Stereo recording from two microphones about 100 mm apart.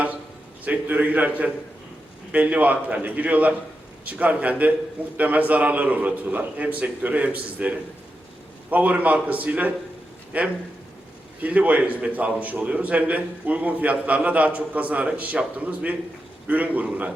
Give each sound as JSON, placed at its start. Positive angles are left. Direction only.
{"t": 0.6, "sound": "a man's voice", "side_deg": -15}